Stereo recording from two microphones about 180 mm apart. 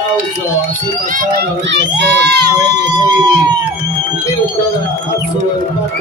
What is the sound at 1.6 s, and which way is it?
Speech, 70° right (ahead or behind).